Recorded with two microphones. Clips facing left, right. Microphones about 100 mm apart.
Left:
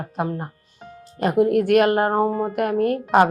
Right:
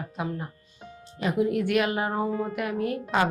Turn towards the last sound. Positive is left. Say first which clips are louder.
# left 8 dB
turn(degrees=55)  # may be behind; listen again after turning